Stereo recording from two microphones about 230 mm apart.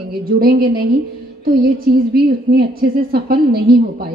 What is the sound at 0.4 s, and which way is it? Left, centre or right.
Speech, right.